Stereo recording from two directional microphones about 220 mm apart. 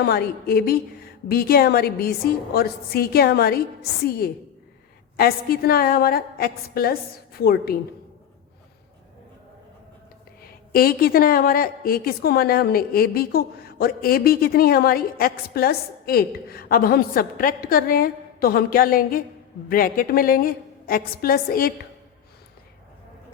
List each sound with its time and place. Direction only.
0.0 s a woman's voice: 45° left (ahead or behind)
5.1 s a woman's voice: 45° left (ahead or behind)
10.7 s a woman's voice: 40° left (ahead or behind)